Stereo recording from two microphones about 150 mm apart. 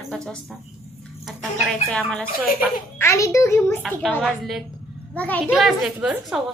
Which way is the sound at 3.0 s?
20° left (ahead or behind).